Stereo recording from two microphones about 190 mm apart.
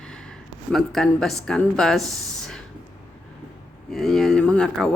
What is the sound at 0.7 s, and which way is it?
Speech, centre (ahead or behind).